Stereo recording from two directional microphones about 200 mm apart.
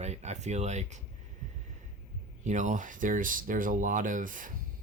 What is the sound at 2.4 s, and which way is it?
Speech, 35° right (ahead or behind).